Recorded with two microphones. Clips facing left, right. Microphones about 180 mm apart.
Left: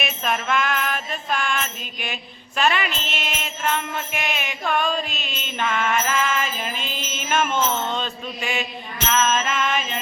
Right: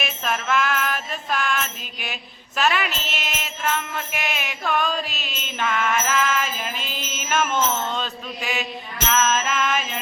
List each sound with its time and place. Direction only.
0.0 s music: centre (ahead or behind)
2.6 s jingle bell: 5° right (ahead or behind)
9.0 s music: centre (ahead or behind)